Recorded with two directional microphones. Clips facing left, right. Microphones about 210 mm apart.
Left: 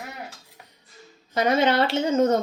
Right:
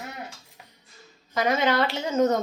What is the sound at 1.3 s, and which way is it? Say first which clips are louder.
Speech: left 3 dB; 30° left (ahead or behind).